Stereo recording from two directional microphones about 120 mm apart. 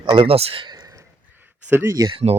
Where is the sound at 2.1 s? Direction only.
50° right (ahead or behind).